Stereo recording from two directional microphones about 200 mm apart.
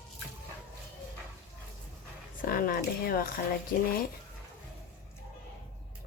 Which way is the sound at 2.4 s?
45° left (ahead or behind).